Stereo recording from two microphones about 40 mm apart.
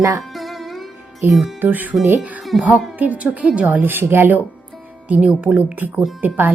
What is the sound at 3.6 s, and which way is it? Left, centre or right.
Speech, right.